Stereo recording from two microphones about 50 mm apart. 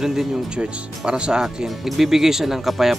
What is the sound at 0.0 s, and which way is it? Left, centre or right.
Speech, centre.